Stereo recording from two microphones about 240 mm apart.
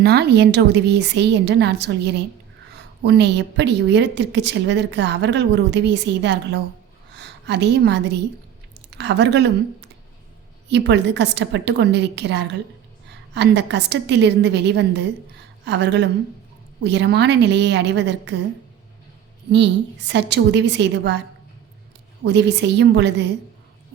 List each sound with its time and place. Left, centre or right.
0.0 s a woman's voice: right
10.7 s a woman's voice: right
19.5 s a woman's voice: right
22.2 s a woman's voice: right